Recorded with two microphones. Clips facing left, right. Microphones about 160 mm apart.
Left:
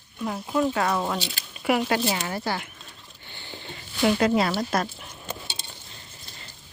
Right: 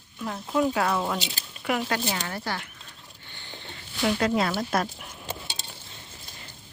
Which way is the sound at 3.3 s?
15° left (ahead or behind).